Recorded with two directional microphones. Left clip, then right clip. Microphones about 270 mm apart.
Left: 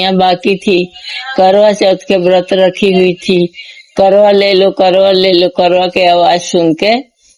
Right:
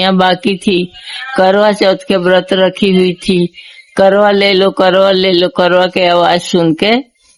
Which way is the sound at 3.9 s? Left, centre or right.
Centre.